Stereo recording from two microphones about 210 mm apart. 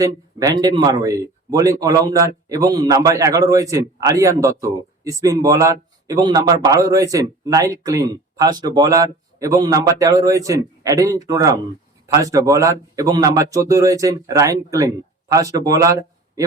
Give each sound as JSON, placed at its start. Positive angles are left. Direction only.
{"t": 0.0, "sound": "speech", "side_deg": -15}